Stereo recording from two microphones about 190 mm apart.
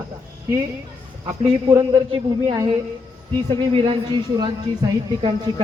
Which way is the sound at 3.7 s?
25° right (ahead or behind).